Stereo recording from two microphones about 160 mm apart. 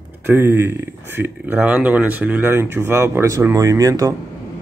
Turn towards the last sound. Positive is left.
turn(degrees=-20)  # may be behind; listen again after turning